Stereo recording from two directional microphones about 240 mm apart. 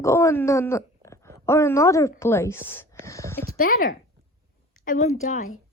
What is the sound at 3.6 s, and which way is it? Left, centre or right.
A woman's voice, left.